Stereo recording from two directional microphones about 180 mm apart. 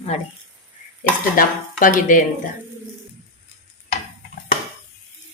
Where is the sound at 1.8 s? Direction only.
50° left (ahead or behind).